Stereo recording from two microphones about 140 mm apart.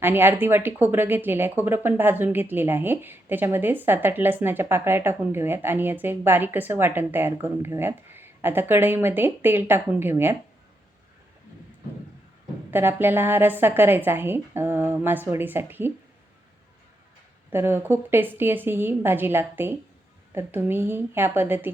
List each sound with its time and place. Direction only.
0.0 s a woman's voice: 15° right (ahead or behind)
12.7 s a woman's voice: 15° right (ahead or behind)
17.5 s a woman's voice: 15° right (ahead or behind)